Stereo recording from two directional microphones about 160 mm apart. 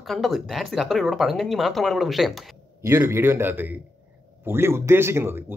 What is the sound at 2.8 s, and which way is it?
Speech, 15° right (ahead or behind).